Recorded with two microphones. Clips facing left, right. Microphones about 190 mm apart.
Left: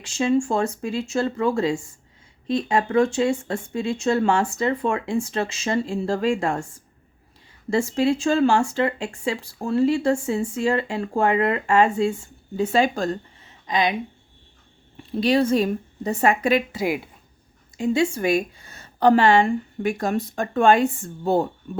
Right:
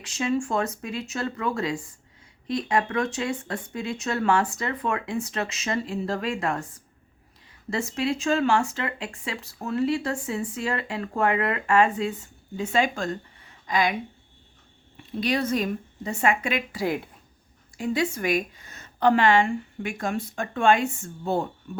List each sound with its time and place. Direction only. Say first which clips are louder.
0.0 s speech: left 5 dB; 30° left (ahead or behind)
7.7 s speech: left 6 dB; 30° left (ahead or behind)
13.7 s speech: left 2 dB; 20° left (ahead or behind)
15.1 s a woman's voice: left 6 dB; 30° left (ahead or behind)
16.7 s speech: left 2 dB; 10° left (ahead or behind)
17.7 s a woman's voice: left 5 dB; 25° left (ahead or behind)